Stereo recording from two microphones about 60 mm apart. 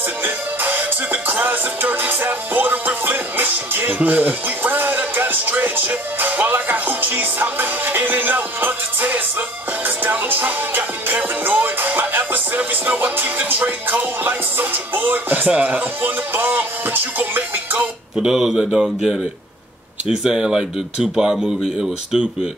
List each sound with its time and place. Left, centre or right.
0.2 s music: right
15.4 s speech: right
16.0 s music: right
18.2 s speech: centre